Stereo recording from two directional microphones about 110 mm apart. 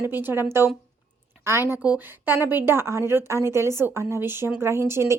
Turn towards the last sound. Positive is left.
turn(degrees=-25)  # may be behind; listen again after turning